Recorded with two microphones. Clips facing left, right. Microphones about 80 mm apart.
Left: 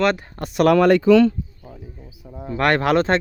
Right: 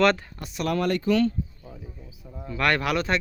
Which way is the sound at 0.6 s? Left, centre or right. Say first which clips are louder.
Left 11 dB; left.